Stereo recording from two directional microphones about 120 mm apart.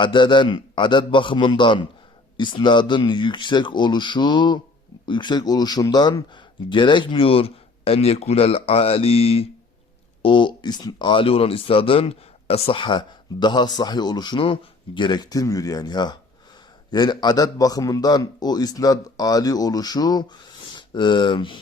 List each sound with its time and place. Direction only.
0.0 s speech: 40° left (ahead or behind)
10.2 s speech: 40° left (ahead or behind)